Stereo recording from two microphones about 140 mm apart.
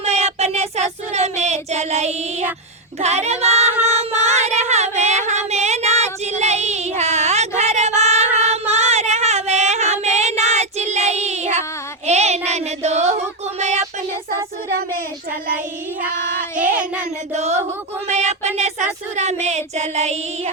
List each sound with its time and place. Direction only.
0.0 s child singing: 50° right (ahead or behind)
3.8 s cat: 50° right (ahead or behind)
12.0 s child singing: 50° right (ahead or behind)
13.6 s a sound: 50° right (ahead or behind)
16.6 s child singing: 10° right (ahead or behind)
17.3 s child singing: 50° right (ahead or behind)